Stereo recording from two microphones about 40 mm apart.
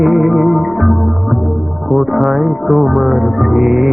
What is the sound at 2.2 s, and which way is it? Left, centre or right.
Music, centre.